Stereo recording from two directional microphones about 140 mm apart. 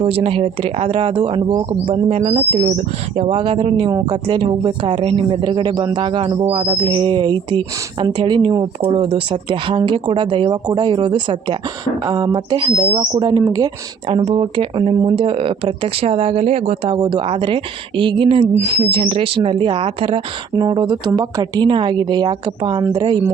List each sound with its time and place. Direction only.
0.0 s speech: 45° right (ahead or behind)
1.8 s speech: 45° right (ahead or behind); by 13.7 s 25° right (ahead or behind)
14.3 s speech: 40° right (ahead or behind)